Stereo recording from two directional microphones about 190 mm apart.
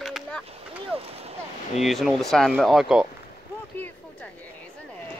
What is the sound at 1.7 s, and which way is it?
Speech, centre (ahead or behind).